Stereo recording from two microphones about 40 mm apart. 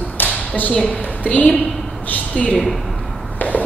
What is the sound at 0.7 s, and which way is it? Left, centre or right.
Speech, centre.